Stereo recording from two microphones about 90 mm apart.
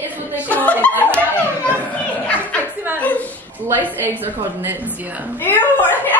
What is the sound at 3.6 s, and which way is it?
Speech, 20° right (ahead or behind).